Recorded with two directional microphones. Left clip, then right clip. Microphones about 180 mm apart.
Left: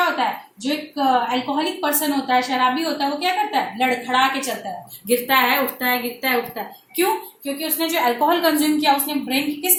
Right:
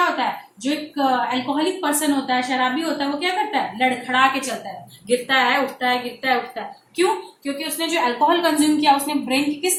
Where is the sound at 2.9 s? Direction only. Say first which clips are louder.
Left 1 dB; 30° left (ahead or behind).